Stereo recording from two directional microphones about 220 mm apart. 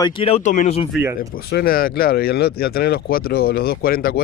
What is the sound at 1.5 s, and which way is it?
Speech, 45° left (ahead or behind).